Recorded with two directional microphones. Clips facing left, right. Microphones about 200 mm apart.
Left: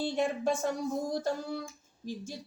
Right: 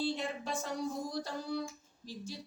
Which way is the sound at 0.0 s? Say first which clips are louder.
Left 6 dB; 50° left (ahead or behind).